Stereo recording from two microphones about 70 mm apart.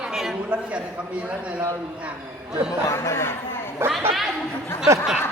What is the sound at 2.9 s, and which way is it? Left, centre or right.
Speech, left.